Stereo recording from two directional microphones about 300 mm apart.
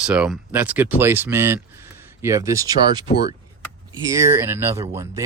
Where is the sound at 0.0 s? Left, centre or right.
Centre.